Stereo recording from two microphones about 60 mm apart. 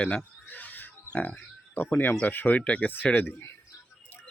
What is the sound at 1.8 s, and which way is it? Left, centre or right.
Speech, left.